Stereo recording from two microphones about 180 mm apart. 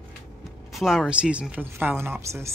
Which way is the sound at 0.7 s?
Centre (ahead or behind).